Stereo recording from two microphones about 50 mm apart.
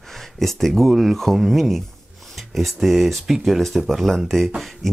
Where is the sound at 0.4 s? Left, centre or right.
Centre.